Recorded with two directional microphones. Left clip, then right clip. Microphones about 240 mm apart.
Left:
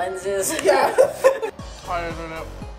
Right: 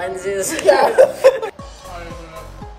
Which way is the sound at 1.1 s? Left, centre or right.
Centre.